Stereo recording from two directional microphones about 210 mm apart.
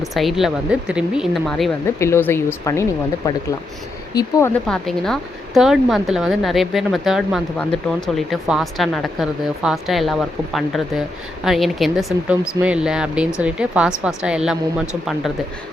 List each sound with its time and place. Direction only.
0.0 s a woman's voice: centre (ahead or behind)
2.0 s a woman's voice: 10° left (ahead or behind)